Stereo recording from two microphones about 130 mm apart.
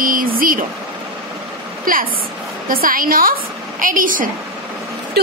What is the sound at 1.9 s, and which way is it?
Speech, 90° right.